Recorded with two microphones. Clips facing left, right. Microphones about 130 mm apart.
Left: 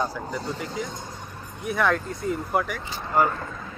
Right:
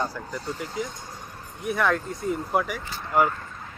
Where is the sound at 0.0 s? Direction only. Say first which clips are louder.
Left 2 dB; centre (ahead or behind).